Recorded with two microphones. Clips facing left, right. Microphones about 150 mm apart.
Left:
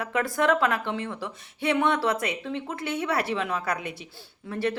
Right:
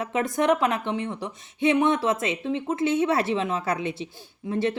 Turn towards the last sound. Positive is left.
turn(degrees=-20)  # may be behind; listen again after turning